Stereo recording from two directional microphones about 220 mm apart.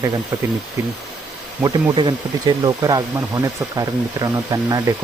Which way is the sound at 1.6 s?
20° right (ahead or behind).